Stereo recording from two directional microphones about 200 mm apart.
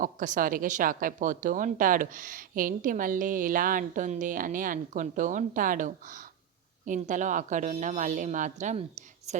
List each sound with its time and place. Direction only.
0.0 s a woman's voice: 40° right (ahead or behind)